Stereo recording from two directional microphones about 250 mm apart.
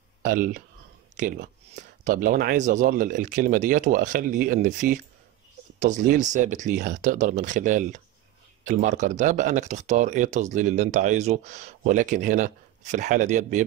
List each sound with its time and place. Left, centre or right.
0.2 s speech: right